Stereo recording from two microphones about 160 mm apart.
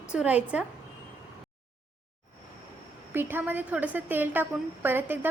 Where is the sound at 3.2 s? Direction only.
10° right (ahead or behind).